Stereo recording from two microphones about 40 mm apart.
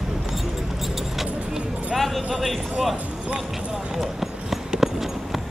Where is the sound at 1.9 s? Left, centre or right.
Centre.